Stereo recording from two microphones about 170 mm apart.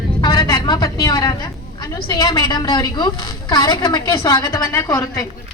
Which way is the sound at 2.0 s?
20° left (ahead or behind).